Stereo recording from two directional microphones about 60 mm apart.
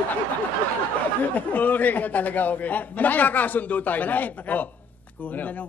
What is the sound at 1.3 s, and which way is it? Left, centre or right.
A man's voice, left.